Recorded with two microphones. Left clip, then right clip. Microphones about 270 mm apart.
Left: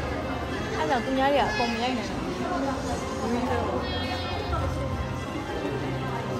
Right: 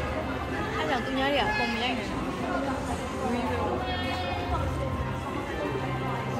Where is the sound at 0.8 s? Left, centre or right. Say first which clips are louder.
Left 5 dB; left.